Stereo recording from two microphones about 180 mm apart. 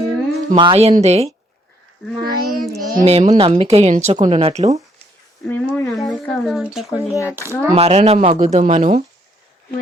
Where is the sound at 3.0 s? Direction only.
35° right (ahead or behind).